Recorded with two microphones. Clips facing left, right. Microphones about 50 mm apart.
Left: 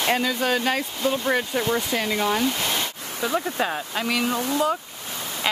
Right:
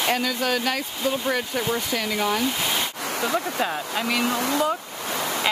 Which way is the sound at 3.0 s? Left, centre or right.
Right.